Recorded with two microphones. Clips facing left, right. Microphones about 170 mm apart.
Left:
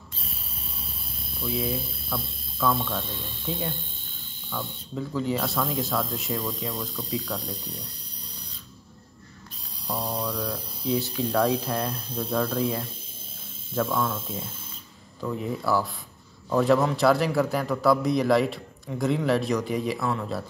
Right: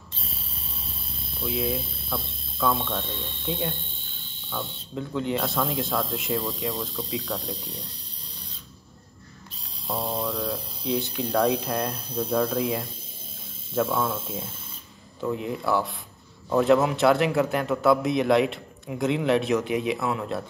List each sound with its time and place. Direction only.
1.4 s speech: centre (ahead or behind)
4.9 s speech: centre (ahead or behind)
9.9 s hum: 25° right (ahead or behind)
10.2 s speech: centre (ahead or behind)
13.9 s speech: 5° right (ahead or behind)